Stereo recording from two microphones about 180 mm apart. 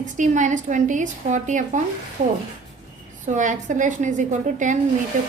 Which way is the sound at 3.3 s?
45° right (ahead or behind).